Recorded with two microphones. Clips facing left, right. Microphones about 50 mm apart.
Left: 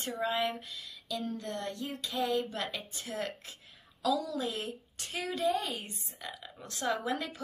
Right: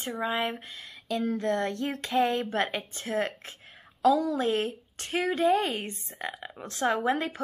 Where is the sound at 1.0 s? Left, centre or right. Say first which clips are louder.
Right 9 dB; right.